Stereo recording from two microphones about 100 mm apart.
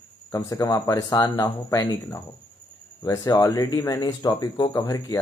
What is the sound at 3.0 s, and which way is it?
Speech, 40° left (ahead or behind).